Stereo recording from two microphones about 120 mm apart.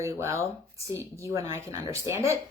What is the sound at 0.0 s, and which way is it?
Speech, 25° right (ahead or behind).